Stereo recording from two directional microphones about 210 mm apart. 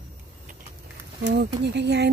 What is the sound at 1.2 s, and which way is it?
Speech, 55° right (ahead or behind).